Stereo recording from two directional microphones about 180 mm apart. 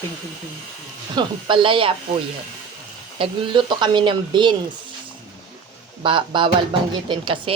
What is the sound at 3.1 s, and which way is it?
Speech, 30° right (ahead or behind).